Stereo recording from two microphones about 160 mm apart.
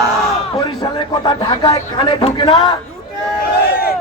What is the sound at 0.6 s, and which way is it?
Speech, 25° left (ahead or behind).